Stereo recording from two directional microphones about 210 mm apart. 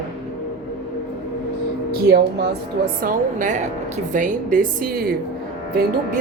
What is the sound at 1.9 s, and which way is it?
A woman's voice, 45° right (ahead or behind).